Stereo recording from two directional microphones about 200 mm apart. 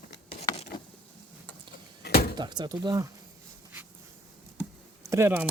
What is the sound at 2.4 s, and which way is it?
Speech, 20° right (ahead or behind).